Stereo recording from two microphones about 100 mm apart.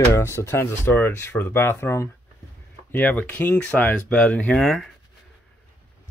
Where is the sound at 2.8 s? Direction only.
15° left (ahead or behind).